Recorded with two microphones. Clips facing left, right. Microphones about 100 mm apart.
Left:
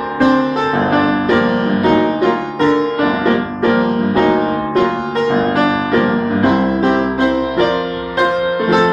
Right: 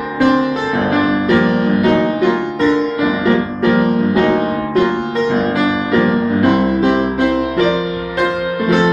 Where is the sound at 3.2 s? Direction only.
15° left (ahead or behind).